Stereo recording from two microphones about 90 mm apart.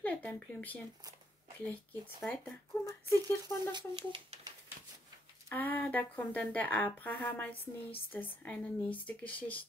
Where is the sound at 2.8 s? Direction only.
40° right (ahead or behind).